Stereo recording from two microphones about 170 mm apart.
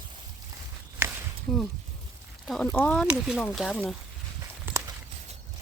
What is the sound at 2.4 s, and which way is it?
Speech, centre (ahead or behind).